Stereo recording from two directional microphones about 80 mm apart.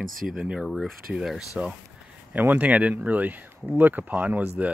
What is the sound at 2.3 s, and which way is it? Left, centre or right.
Speech, right.